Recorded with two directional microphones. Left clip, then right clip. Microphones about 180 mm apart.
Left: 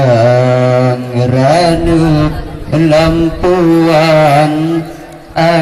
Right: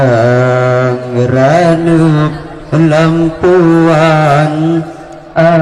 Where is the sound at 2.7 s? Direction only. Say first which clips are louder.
Left 1 dB; 40° right (ahead or behind).